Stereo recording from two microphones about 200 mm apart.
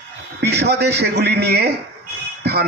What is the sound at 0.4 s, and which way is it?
A man's voice, 55° right (ahead or behind).